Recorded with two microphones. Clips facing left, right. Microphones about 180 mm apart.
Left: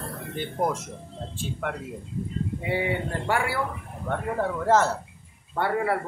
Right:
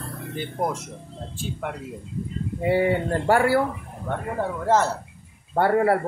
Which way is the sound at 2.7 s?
40° right (ahead or behind).